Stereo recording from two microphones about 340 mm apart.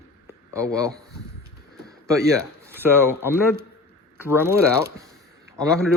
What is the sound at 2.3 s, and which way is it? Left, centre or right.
Speech, centre.